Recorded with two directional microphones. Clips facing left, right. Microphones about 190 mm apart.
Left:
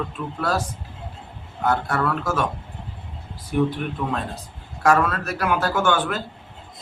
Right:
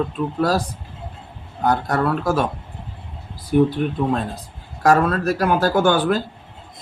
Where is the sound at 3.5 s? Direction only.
35° right (ahead or behind).